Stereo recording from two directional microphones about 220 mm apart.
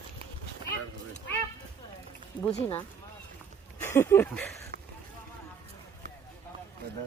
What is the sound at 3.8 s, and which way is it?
Speech, 10° left (ahead or behind).